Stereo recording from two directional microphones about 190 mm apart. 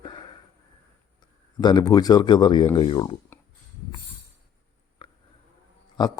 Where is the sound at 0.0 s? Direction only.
25° left (ahead or behind).